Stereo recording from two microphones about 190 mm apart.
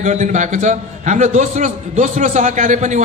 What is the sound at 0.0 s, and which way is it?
A man's voice, 40° right (ahead or behind).